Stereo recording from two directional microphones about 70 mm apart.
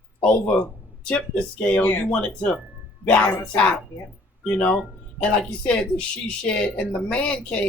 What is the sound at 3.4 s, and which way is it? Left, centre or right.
Speech, centre.